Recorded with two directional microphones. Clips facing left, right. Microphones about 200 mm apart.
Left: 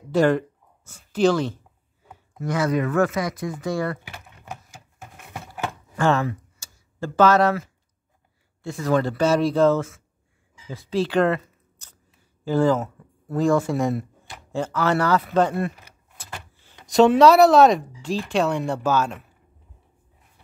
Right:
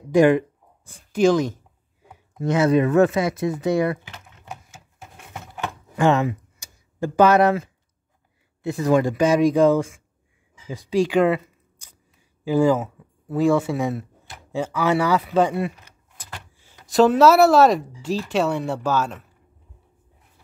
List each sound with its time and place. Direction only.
0.1 s speech: 15° right (ahead or behind)
2.3 s speech: 25° right (ahead or behind)
5.9 s tick-tock: 15° right (ahead or behind)
8.6 s speech: 20° right (ahead or behind)
10.7 s camera: 15° right (ahead or behind)
12.4 s speech: 10° right (ahead or behind)
16.9 s speech: centre (ahead or behind)